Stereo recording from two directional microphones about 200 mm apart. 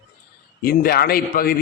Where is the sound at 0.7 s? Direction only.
50° left (ahead or behind).